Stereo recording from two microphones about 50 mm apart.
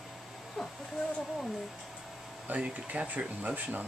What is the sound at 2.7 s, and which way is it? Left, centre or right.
Speech, right.